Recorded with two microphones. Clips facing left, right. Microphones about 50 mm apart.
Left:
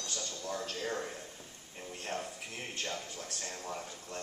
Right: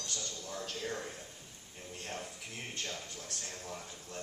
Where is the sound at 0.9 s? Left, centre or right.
Centre.